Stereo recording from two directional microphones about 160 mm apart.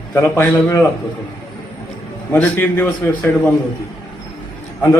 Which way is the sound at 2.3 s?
10° left (ahead or behind).